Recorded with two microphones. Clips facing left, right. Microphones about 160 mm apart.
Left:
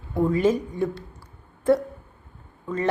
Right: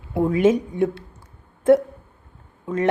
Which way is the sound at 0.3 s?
5° right (ahead or behind).